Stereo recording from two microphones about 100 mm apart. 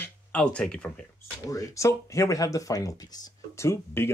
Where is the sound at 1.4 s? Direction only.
35° left (ahead or behind).